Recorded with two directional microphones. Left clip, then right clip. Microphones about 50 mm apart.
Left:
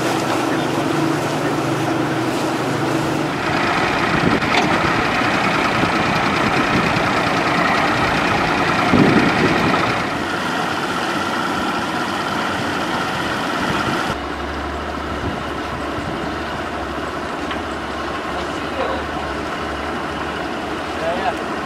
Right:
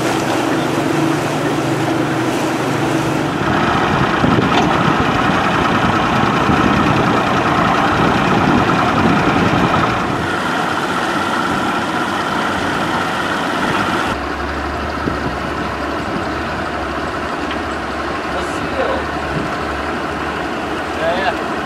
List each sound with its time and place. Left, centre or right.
3.4 s vehicle: left